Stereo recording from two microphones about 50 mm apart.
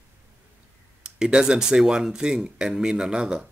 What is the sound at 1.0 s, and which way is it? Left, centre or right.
Speech, centre.